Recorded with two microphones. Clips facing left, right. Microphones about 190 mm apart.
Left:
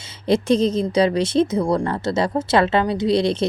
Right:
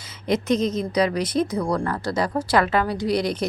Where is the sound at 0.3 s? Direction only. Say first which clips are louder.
Left 4 dB; 30° left (ahead or behind).